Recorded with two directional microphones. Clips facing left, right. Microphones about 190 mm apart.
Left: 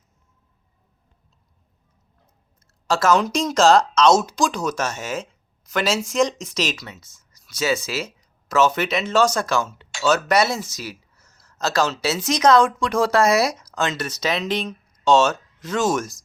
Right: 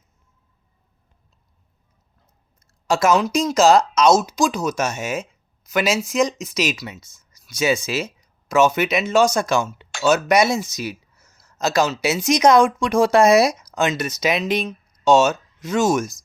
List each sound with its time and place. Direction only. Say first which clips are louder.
2.8 s speech: right 1 dB; 10° right (ahead or behind)